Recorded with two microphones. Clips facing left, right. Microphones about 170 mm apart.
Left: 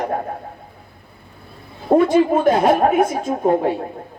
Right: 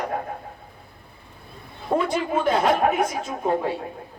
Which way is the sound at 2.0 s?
50° left (ahead or behind).